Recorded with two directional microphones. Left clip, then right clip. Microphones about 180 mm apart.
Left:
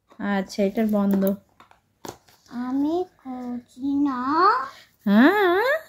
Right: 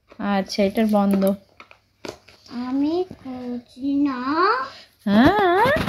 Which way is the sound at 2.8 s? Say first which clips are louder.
Right 2 dB; 15° left (ahead or behind).